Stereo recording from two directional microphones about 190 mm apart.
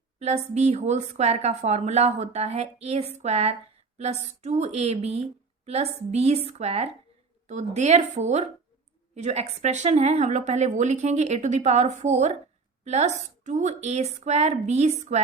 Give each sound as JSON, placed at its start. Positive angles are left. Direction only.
{"t": 0.2, "sound": "speech", "side_deg": -35}